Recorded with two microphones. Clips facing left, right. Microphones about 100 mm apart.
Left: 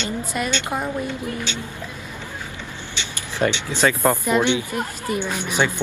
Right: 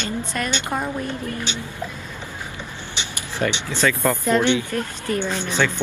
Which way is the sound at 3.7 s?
20° left (ahead or behind).